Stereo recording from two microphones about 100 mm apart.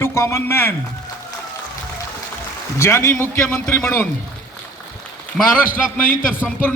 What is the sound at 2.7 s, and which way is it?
Speech, 30° left (ahead or behind).